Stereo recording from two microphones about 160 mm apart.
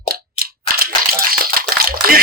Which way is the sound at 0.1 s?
65° right (ahead or behind).